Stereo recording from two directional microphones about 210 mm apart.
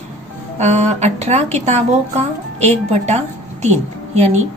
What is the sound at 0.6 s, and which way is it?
A woman's voice, 30° right (ahead or behind).